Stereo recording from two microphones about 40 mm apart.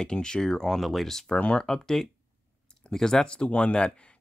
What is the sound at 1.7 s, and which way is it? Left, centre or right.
Speech, centre.